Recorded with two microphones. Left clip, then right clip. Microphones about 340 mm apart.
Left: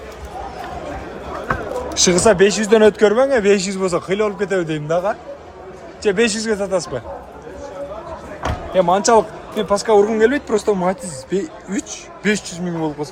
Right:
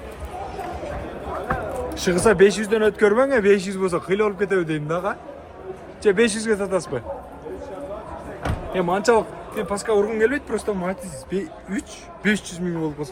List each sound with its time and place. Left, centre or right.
2.0 s speech: centre
2.6 s speech: centre
3.0 s a man's voice: centre
8.7 s speech: centre